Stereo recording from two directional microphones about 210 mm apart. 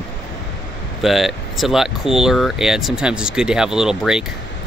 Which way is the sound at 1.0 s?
Centre (ahead or behind).